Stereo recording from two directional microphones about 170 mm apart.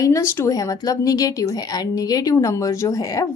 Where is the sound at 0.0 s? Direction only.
15° left (ahead or behind).